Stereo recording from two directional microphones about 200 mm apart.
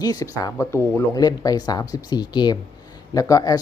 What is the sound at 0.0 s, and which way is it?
A man's voice, 20° left (ahead or behind).